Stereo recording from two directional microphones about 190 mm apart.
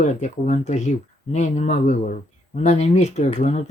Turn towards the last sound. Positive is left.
turn(degrees=40)  # may be behind; listen again after turning